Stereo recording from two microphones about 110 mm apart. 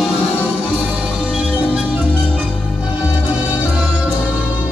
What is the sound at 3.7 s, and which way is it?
Music, 10° right (ahead or behind).